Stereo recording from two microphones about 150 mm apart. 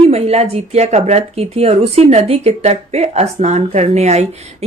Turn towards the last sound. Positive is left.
turn(degrees=-45)  # may be behind; listen again after turning